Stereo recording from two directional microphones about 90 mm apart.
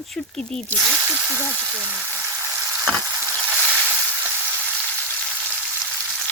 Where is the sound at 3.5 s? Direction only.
15° right (ahead or behind).